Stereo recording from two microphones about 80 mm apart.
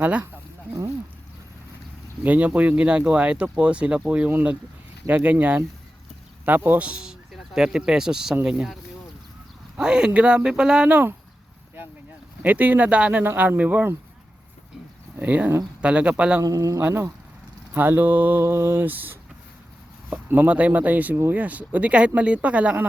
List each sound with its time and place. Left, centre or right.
0.0 s speech: centre
2.2 s speech: centre
12.4 s speech: right
15.2 s speech: right
16.4 s speech: right
17.7 s speech: right
18.4 s mantra: right
20.1 s speech: right